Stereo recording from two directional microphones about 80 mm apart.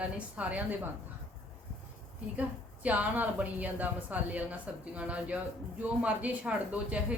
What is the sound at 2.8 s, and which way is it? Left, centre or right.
A woman's voice, right.